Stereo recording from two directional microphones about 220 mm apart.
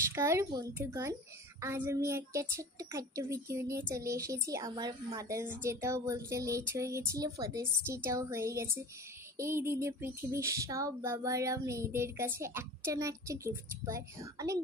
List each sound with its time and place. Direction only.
0.1 s speech: 10° right (ahead or behind)